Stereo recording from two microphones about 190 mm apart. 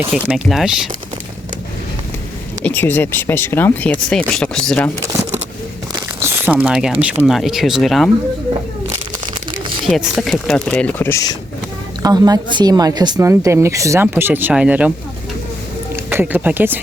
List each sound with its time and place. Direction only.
0.0 s speech: 5° right (ahead or behind)
2.6 s speech: 10° left (ahead or behind)
5.9 s speech: 15° right (ahead or behind); by 8.1 s centre (ahead or behind)
9.8 s speech: centre (ahead or behind); by 11.3 s 15° left (ahead or behind)
12.0 s speech: 20° right (ahead or behind)
16.0 s speech: 10° right (ahead or behind)